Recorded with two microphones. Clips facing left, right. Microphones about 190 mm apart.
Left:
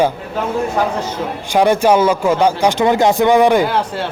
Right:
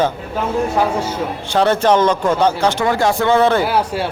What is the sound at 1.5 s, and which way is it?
A man's voice, 10° left (ahead or behind).